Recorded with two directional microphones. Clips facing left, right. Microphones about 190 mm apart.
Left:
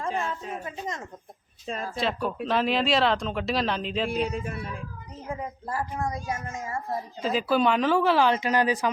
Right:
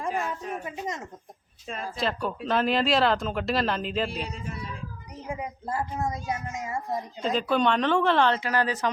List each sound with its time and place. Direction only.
0.3 s a woman's voice: 20° right (ahead or behind)
1.6 s speech: 40° left (ahead or behind)
2.0 s speech: centre (ahead or behind)
4.3 s speech: 55° left (ahead or behind)
5.3 s a child's voice: 20° right (ahead or behind)
7.2 s speech: 5° left (ahead or behind)